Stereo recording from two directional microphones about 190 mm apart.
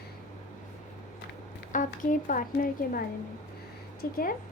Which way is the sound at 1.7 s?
45° left (ahead or behind).